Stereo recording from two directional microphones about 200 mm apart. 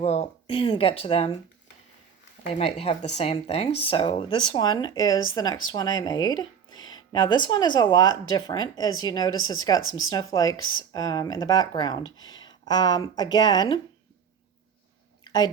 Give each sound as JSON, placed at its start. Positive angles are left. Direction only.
{"t": 0.0, "sound": "speech", "side_deg": 30}
{"t": 2.5, "sound": "speech", "side_deg": 30}
{"t": 9.7, "sound": "speech", "side_deg": 80}
{"t": 10.2, "sound": "speech", "side_deg": 20}
{"t": 10.6, "sound": "speech", "side_deg": 80}
{"t": 10.9, "sound": "speech", "side_deg": 20}
{"t": 15.2, "sound": "a sound", "side_deg": 20}